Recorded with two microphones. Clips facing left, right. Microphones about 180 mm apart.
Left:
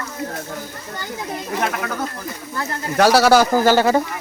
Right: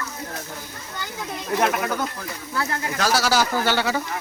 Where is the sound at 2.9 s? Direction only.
65° left (ahead or behind); by 4.0 s 45° left (ahead or behind).